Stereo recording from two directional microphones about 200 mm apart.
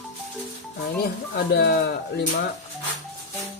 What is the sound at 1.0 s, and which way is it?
Speech, 55° left (ahead or behind).